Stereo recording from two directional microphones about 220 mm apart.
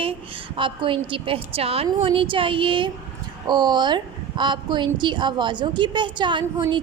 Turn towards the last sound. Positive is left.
turn(degrees=-20)  # may be behind; listen again after turning